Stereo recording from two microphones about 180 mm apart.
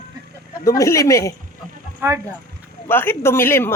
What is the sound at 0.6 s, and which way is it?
Speech, 15° left (ahead or behind).